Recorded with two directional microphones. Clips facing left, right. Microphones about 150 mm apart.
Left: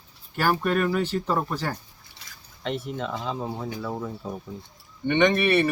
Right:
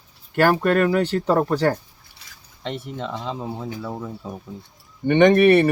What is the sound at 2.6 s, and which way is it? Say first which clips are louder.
Speech: even; 25° right (ahead or behind).